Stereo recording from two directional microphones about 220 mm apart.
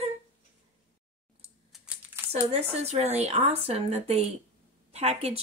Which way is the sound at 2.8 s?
30° right (ahead or behind).